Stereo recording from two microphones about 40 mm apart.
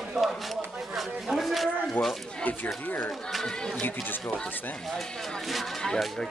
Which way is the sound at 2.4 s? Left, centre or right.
Left.